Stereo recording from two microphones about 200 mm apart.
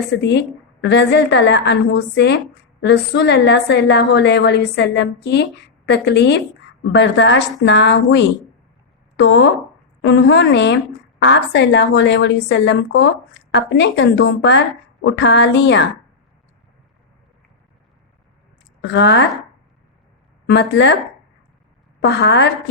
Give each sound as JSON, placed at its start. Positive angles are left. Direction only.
{"t": 0.2, "sound": "a woman's voice", "side_deg": 60}
{"t": 18.8, "sound": "a woman's voice", "side_deg": 60}
{"t": 20.5, "sound": "a woman's voice", "side_deg": 60}
{"t": 22.0, "sound": "a woman's voice", "side_deg": 60}